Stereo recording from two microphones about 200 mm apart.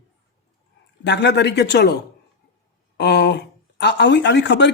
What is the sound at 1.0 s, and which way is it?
Speech, 60° left (ahead or behind).